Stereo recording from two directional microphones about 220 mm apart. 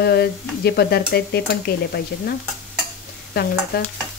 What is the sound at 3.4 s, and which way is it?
Stir, 45° left (ahead or behind).